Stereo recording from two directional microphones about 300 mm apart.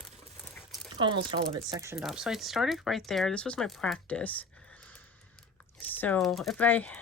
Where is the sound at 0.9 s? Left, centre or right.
Centre.